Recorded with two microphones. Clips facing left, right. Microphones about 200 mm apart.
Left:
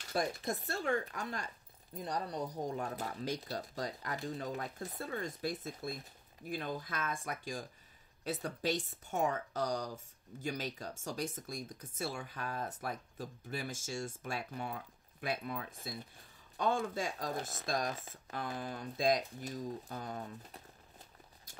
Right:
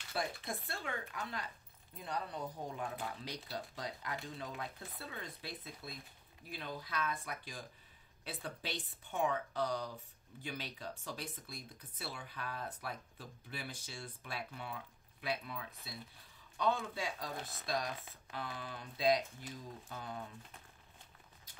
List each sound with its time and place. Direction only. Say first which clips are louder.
0.1 s speech: left 5 dB; 45° left (ahead or behind)